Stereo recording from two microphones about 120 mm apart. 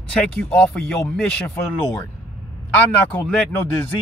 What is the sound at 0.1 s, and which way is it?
Speech, 10° left (ahead or behind).